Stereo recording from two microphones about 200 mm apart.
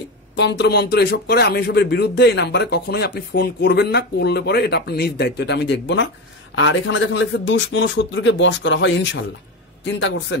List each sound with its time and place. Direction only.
0.4 s a man's voice: 60° left (ahead or behind)